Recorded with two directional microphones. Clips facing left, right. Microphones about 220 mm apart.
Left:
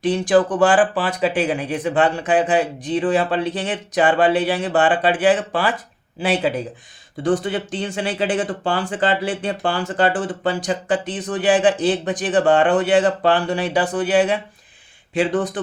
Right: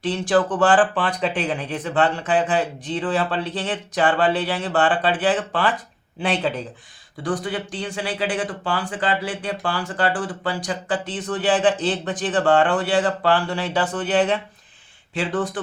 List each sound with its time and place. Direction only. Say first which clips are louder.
0.0 s speech: left 4 dB; 15° left (ahead or behind)
7.2 s speech: left 5 dB; 25° left (ahead or behind)